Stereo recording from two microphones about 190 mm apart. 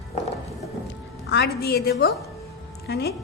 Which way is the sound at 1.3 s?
60° left (ahead or behind).